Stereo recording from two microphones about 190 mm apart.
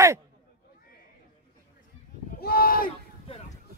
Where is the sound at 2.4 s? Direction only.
50° left (ahead or behind).